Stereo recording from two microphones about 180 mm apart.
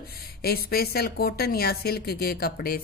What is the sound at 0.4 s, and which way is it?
A woman's voice, 60° left (ahead or behind).